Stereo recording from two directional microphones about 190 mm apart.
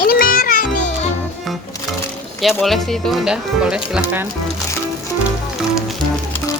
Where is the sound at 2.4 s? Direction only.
Centre (ahead or behind).